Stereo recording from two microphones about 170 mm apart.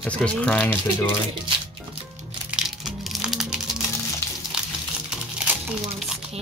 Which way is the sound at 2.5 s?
5° right (ahead or behind).